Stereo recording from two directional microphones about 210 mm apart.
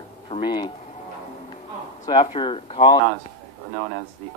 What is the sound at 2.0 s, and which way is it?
Speech, 20° left (ahead or behind).